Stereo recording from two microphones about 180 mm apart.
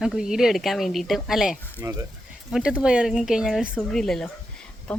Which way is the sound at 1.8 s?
20° right (ahead or behind).